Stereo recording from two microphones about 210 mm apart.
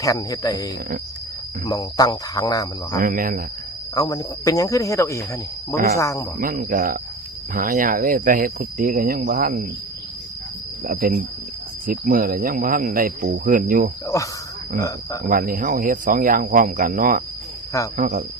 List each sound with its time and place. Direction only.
0.0 s speech: 15° left (ahead or behind)
3.0 s speech: 40° right (ahead or behind)
3.9 s speech: 15° left (ahead or behind)
6.4 s speech: 40° right (ahead or behind)
10.8 s speech: 45° right (ahead or behind)
14.1 s speech: 15° left (ahead or behind)
15.3 s speech: 40° right (ahead or behind)